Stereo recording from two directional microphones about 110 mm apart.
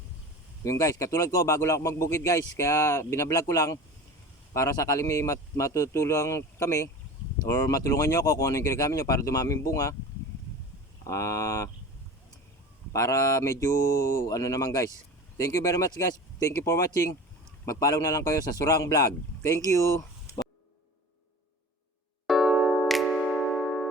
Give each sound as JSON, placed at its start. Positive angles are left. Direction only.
{"t": 0.6, "sound": "speech", "side_deg": 30}
{"t": 11.0, "sound": "speech", "side_deg": 30}
{"t": 12.9, "sound": "speech", "side_deg": 30}
{"t": 22.3, "sound": "music", "side_deg": 0}